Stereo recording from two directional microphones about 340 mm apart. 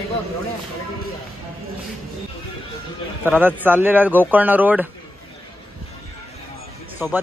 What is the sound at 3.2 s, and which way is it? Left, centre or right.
Speech, centre.